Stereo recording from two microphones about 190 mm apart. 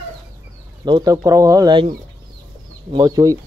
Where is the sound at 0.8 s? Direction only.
20° right (ahead or behind).